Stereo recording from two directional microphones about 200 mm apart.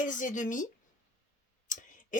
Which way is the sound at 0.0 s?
40° left (ahead or behind).